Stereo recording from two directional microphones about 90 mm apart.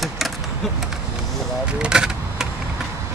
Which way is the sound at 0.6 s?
Centre (ahead or behind).